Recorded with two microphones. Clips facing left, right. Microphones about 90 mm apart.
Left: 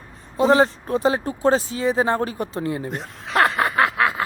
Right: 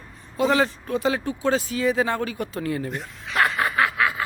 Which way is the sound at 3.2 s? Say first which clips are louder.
Left 3 dB; 40° left (ahead or behind).